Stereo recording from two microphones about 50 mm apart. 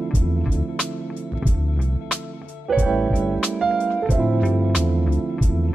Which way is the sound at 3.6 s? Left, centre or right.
Centre.